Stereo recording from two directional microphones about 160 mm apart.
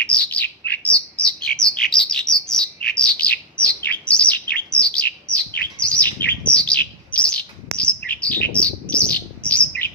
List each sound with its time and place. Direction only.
0.0 s bird: 10° left (ahead or behind)